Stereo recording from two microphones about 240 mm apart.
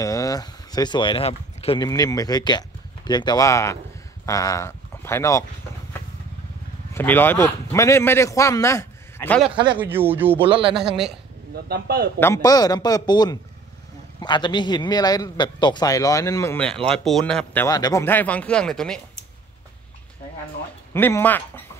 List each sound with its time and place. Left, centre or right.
0.0 s a man's voice: centre
6.9 s a man's voice: centre
9.8 s speech: centre
10.4 s speech: right
11.5 s speech: right
12.2 s a man's voice: centre
17.6 s a man's voice: centre
20.9 s a man's voice: centre